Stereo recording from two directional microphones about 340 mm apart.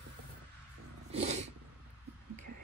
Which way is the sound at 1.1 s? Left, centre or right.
Centre.